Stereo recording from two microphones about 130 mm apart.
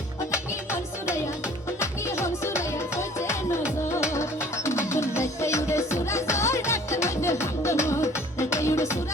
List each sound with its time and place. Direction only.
1.8 s music: 20° left (ahead or behind)